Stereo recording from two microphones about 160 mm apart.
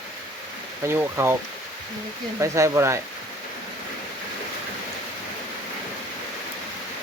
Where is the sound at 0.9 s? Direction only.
15° right (ahead or behind).